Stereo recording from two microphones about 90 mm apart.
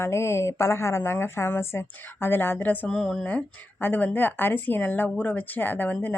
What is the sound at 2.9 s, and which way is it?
Speech, 5° left (ahead or behind).